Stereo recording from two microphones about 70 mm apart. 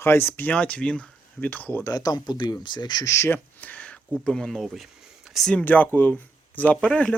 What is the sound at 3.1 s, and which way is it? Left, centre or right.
Speech, left.